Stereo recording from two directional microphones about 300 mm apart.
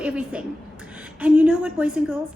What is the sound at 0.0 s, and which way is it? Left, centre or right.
A woman's voice, centre.